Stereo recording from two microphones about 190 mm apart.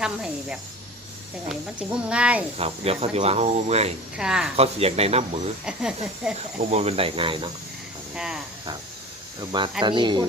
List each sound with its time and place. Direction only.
0.0 s a child's voice: 5° right (ahead or behind)
2.6 s speech: 30° right (ahead or behind)
4.2 s a child's voice: 5° right (ahead or behind)
4.5 s speech: 30° right (ahead or behind)
5.6 s a child's voice: 5° right (ahead or behind)
6.6 s speech: 35° right (ahead or behind)
8.1 s speech: 5° right (ahead or behind)
9.4 s speech: 20° right (ahead or behind)